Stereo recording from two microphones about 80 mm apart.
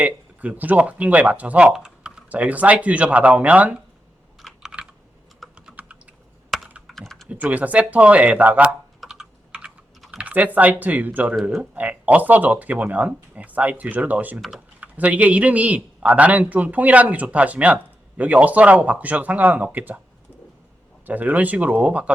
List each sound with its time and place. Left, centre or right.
0.0 s a man's voice: centre
4.4 s computer keyboard: centre
5.5 s typing: centre
6.5 s computer keyboard: centre
6.8 s typing: centre
7.3 s speech: centre
9.0 s typing: centre
9.5 s typing: centre
10.2 s a man's voice: centre
21.1 s a man's voice: centre